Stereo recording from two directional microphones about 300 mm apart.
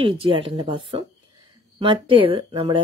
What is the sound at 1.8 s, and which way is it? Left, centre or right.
Speech, centre.